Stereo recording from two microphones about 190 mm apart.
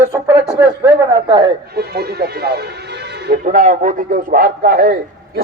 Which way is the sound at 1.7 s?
55° right (ahead or behind).